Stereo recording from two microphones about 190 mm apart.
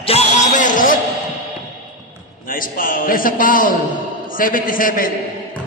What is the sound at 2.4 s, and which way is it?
A man's voice, 45° left (ahead or behind).